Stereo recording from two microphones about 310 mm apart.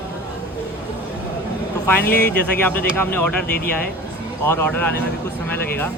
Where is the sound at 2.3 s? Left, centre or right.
Centre.